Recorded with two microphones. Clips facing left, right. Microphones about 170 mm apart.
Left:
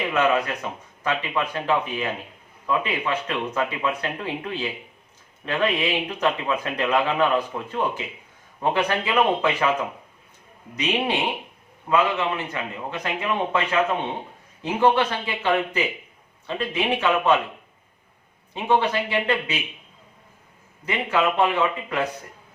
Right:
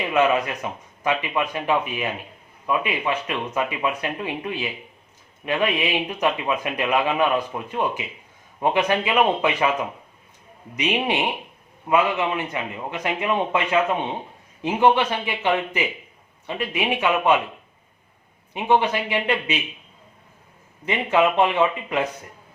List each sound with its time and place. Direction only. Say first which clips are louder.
0.1 s speech: right 3 dB; 15° right (ahead or behind)
10.8 s speech: right 1 dB; 15° right (ahead or behind)
18.5 s speech: right 1 dB; 15° right (ahead or behind)
20.8 s speech: right 3 dB; 20° right (ahead or behind)